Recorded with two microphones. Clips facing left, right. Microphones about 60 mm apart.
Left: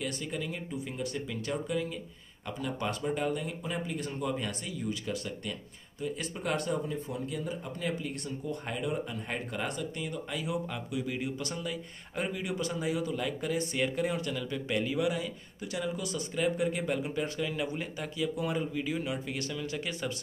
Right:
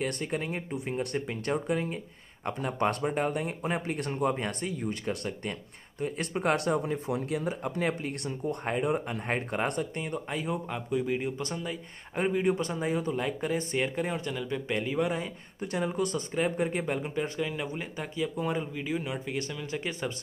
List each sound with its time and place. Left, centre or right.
0.0 s speech: right
15.0 s speech: right